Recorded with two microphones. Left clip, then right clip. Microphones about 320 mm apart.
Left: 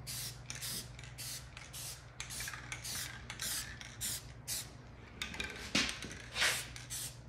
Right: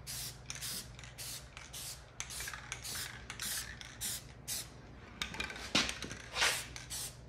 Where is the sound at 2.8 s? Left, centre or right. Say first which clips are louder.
Even; centre.